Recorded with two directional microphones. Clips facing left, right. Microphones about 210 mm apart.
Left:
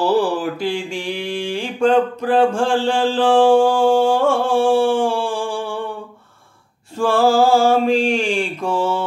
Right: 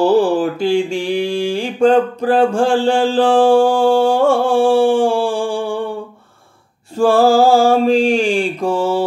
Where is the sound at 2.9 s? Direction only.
40° right (ahead or behind).